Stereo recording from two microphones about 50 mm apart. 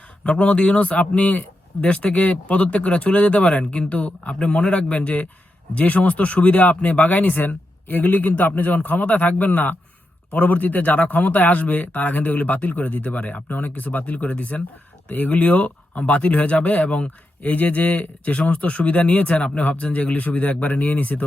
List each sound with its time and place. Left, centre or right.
0.3 s speech: left